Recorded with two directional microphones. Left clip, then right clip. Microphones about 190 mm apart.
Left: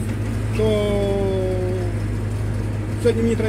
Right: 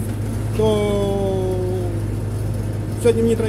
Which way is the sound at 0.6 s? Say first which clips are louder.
Right 2 dB; 25° right (ahead or behind).